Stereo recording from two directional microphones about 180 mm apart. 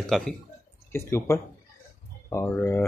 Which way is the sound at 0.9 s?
15° left (ahead or behind).